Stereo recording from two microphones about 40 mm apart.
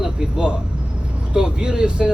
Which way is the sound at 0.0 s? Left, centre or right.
Centre.